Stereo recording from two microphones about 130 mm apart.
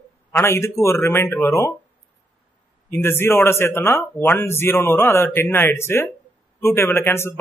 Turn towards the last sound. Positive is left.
turn(degrees=20)  # may be behind; listen again after turning